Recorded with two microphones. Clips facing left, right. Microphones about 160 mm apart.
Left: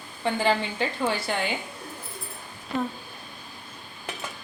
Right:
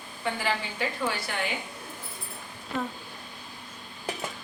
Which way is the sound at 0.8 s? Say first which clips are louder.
Left 3 dB; 30° left (ahead or behind).